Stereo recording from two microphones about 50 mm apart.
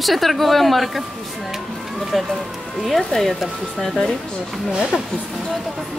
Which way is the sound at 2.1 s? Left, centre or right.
Centre.